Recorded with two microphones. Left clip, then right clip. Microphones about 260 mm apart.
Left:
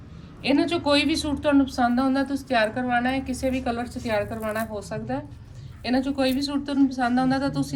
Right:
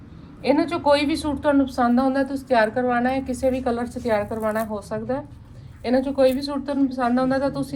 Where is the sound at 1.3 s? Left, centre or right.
Centre.